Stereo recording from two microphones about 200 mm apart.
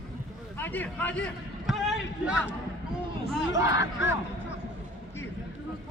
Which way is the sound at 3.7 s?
70° left (ahead or behind).